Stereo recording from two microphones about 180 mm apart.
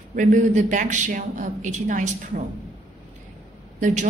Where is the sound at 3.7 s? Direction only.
40° right (ahead or behind).